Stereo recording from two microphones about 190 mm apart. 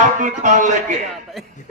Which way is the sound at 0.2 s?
40° right (ahead or behind).